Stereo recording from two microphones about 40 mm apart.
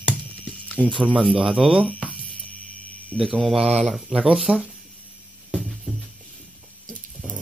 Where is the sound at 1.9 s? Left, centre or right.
Left.